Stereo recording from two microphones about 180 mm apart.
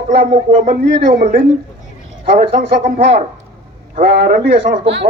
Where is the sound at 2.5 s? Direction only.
50° right (ahead or behind).